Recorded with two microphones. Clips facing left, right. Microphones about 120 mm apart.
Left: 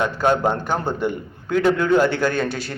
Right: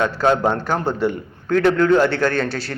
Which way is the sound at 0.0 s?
10° left (ahead or behind).